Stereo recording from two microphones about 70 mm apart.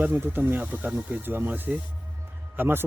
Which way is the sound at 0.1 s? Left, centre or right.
Right.